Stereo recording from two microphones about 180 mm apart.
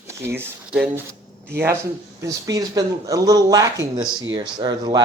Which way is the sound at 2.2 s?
20° right (ahead or behind).